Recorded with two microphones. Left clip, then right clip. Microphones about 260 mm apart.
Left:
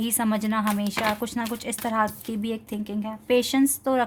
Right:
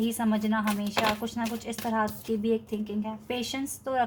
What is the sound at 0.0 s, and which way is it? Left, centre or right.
Speech, left.